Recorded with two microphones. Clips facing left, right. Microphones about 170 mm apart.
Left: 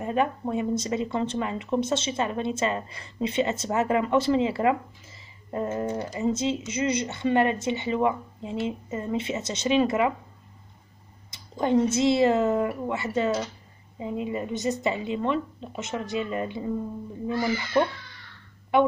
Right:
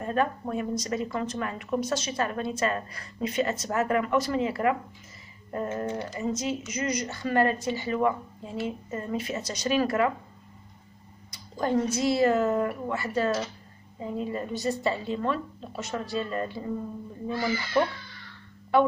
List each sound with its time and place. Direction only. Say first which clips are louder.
0.0 s speech: left 2 dB; 20° left (ahead or behind)
11.2 s a woman's voice: left 3 dB; 25° left (ahead or behind)
18.7 s a woman's voice: left 1 dB; 20° left (ahead or behind)